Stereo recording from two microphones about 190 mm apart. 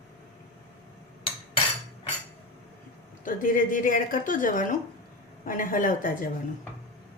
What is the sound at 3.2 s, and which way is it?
A woman's voice, 45° left (ahead or behind).